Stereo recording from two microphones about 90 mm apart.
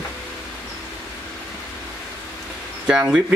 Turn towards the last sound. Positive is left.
turn(degrees=-10)  # may be behind; listen again after turning